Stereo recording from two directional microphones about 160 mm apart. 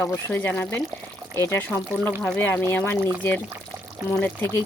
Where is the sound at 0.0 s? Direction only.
15° left (ahead or behind).